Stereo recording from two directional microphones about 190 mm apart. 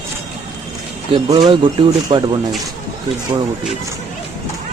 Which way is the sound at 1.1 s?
25° right (ahead or behind).